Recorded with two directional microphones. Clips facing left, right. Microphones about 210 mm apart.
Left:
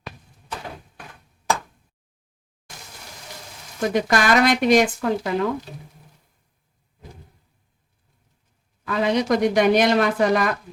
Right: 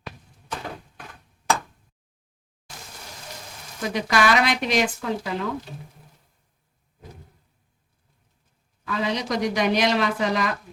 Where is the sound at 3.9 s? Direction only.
50° left (ahead or behind).